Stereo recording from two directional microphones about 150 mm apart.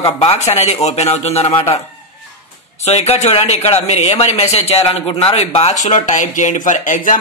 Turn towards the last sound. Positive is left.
turn(degrees=60)  # may be behind; listen again after turning